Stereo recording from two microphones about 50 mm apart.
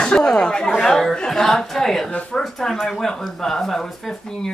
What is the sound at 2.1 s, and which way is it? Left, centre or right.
Speech, left.